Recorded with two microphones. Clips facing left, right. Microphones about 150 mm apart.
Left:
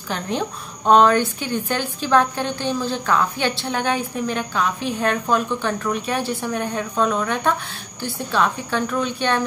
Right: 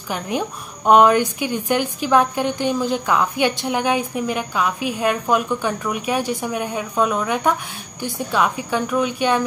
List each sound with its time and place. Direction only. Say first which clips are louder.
0.1 s a woman's voice: right 1 dB; 10° right (ahead or behind)